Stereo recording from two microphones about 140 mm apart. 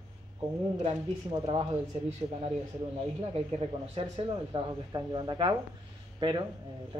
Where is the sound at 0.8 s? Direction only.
40° right (ahead or behind).